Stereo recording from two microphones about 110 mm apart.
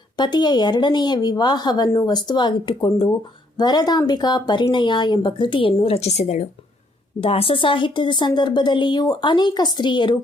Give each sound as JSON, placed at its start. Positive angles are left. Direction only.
{"t": 0.2, "sound": "speech", "side_deg": 40}
{"t": 7.2, "sound": "speech", "side_deg": 60}